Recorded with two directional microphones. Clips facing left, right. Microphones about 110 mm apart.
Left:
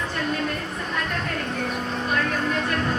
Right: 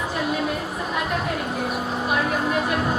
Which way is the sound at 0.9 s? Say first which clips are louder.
Right 3 dB; 10° right (ahead or behind).